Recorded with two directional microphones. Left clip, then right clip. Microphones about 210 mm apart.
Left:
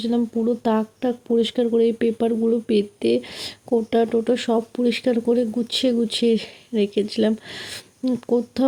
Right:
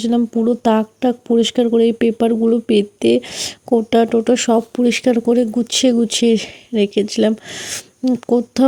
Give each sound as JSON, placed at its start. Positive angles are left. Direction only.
{"t": 0.0, "sound": "speech", "side_deg": -30}